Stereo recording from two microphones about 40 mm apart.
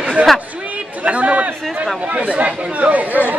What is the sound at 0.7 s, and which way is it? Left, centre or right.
Chatter, right.